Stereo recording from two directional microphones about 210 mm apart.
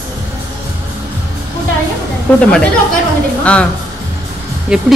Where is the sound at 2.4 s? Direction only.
5° left (ahead or behind).